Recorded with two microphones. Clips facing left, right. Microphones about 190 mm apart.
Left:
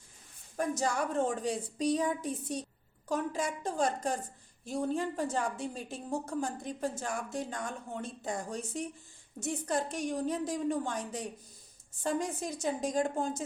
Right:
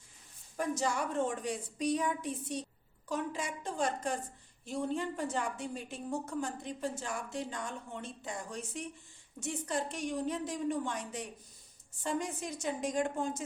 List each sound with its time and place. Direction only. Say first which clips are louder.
0.8 s a woman's voice: left 2 dB; 40° left (ahead or behind)